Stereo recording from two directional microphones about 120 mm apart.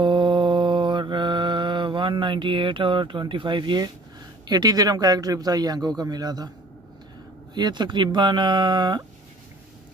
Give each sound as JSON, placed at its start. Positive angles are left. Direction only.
{"t": 0.0, "sound": "mantra", "side_deg": -45}
{"t": 4.5, "sound": "a man's voice", "side_deg": -35}
{"t": 7.5, "sound": "a man's voice", "side_deg": -40}